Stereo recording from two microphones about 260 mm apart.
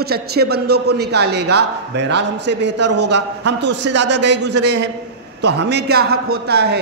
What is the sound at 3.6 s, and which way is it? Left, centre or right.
A man's voice, right.